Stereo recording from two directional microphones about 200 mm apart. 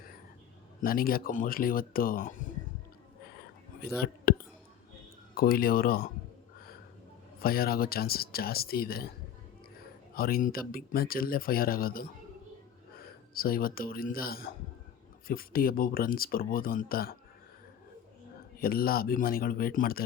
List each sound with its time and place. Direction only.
0.8 s speech: 45° left (ahead or behind)
4.0 s a sound: 50° left (ahead or behind)
5.3 s speech: 50° left (ahead or behind)
7.4 s speech: 50° left (ahead or behind)
10.2 s speech: 45° left (ahead or behind)
13.3 s speech: 50° left (ahead or behind)
18.6 s speech: 50° left (ahead or behind)